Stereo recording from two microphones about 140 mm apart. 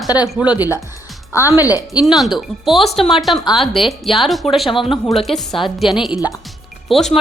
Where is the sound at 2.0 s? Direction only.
Centre (ahead or behind).